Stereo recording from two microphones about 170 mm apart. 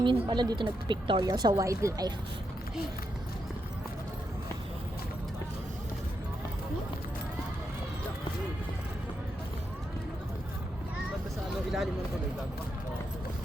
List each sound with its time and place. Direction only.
0.0 s speech: 30° right (ahead or behind)